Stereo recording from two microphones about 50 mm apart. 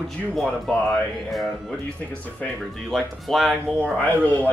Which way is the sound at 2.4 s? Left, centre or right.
Left.